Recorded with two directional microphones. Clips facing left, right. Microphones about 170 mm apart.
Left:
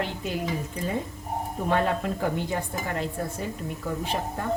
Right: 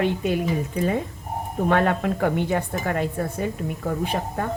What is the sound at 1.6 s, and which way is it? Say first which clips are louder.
A woman's voice: right 4 dB; 65° right (ahead or behind).